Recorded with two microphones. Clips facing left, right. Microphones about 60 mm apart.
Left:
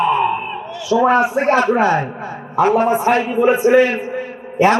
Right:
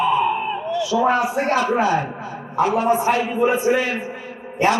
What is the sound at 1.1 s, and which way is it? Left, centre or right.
Speech, left.